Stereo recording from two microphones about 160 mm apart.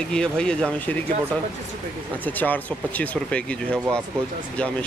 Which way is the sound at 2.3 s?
10° left (ahead or behind).